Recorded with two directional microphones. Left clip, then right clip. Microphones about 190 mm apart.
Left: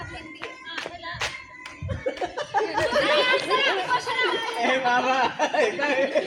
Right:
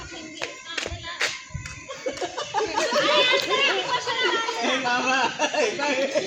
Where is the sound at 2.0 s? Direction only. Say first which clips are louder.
Left 1 dB; 30° right (ahead or behind).